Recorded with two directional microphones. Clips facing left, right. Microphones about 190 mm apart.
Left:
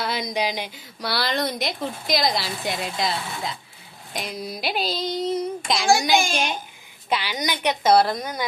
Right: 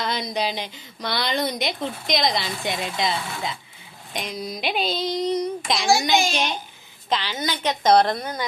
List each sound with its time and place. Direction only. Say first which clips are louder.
0.0 s a woman's voice: even; 10° left (ahead or behind)
6.1 s a child's voice: even; 50° left (ahead or behind)
7.1 s a woman's voice: even; 10° left (ahead or behind)